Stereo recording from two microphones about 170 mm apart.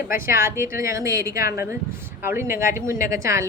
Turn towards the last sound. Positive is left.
turn(degrees=-15)  # may be behind; listen again after turning